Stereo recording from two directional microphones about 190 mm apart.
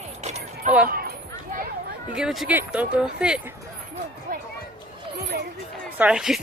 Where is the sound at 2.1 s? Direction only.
Centre (ahead or behind).